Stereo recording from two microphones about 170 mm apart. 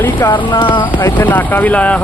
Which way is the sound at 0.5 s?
30° left (ahead or behind).